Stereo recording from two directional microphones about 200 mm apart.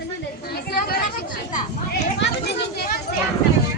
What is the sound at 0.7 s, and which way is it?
Chatter, 45° left (ahead or behind).